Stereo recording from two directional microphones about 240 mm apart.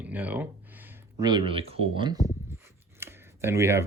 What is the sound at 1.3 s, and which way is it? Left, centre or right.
Speech, right.